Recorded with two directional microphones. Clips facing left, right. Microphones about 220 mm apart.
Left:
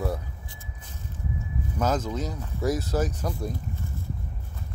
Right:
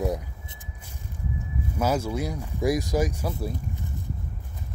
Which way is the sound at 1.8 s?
10° right (ahead or behind).